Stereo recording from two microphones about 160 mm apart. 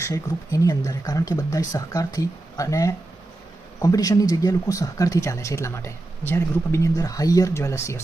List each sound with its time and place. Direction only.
0.0 s speech: 20° left (ahead or behind)